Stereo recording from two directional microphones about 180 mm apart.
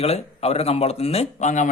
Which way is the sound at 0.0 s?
35° left (ahead or behind).